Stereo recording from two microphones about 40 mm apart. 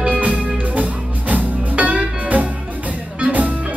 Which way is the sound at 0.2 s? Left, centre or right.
Right.